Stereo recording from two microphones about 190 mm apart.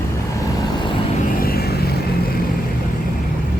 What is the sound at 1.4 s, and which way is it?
Vehicle, 50° left (ahead or behind).